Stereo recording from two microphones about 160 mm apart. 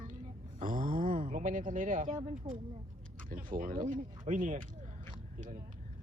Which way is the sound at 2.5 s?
35° right (ahead or behind).